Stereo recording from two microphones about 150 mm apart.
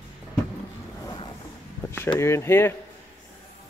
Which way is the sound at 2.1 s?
20° left (ahead or behind).